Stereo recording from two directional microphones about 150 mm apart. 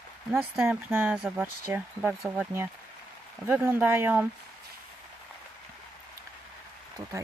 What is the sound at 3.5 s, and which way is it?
Speech, 10° right (ahead or behind).